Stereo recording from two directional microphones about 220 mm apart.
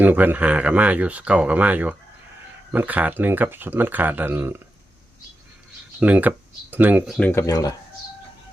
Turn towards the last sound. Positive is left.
turn(degrees=15)  # may be behind; listen again after turning